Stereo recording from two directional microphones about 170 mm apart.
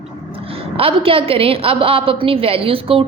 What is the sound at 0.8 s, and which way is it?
A woman's voice, 35° right (ahead or behind).